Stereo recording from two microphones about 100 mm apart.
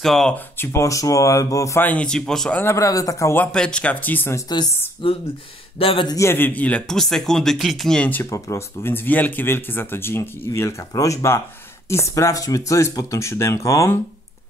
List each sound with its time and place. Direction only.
0.0 s speech: centre (ahead or behind)
0.7 s speech: 35° left (ahead or behind)
1.8 s speech: 15° left (ahead or behind)
2.6 s speech: 30° left (ahead or behind)
3.5 s speech: 10° left (ahead or behind)
5.0 s speech: 60° left (ahead or behind)
6.0 s speech: 30° left (ahead or behind); by 8.1 s 5° left (ahead or behind)
8.1 s speech: 30° left (ahead or behind)